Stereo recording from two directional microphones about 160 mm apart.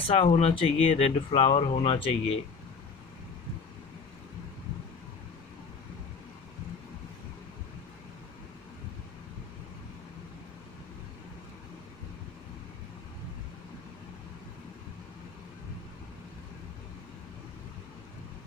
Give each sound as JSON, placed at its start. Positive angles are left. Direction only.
{"t": 0.1, "sound": "speech", "side_deg": 40}